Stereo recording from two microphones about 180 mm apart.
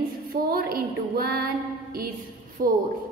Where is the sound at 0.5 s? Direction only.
55° right (ahead or behind).